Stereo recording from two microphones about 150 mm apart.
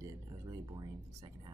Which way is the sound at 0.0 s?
25° right (ahead or behind).